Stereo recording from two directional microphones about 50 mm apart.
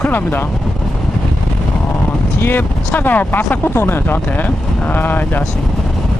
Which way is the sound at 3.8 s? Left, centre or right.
Left.